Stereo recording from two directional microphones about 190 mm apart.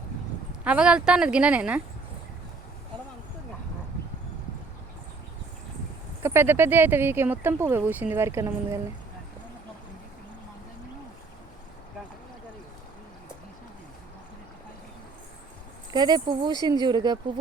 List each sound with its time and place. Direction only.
0.6 s speech: 5° right (ahead or behind)
6.2 s speech: 10° right (ahead or behind)
15.9 s speech: 20° right (ahead or behind)